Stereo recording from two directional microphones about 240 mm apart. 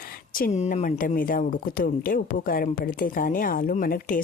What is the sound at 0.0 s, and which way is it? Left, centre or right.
Speech, left.